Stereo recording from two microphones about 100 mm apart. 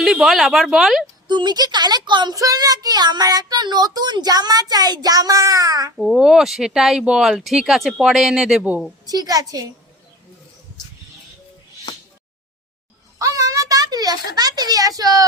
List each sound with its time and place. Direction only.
0.0 s speech: 5° right (ahead or behind)
1.3 s a woman's voice: 50° right (ahead or behind)
2.3 s speech: 35° right (ahead or behind)
6.0 s speech: 5° right (ahead or behind)
9.0 s speech: 40° right (ahead or behind)
13.1 s a sound: 35° right (ahead or behind)